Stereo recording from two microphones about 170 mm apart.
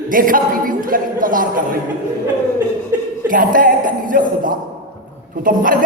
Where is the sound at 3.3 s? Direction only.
55° right (ahead or behind).